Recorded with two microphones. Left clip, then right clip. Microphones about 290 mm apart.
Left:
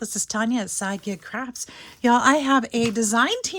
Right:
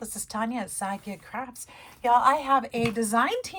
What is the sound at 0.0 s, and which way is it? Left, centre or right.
Speech, left.